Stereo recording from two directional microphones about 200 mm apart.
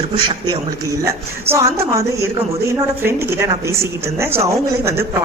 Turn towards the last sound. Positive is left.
turn(degrees=-10)  # may be behind; listen again after turning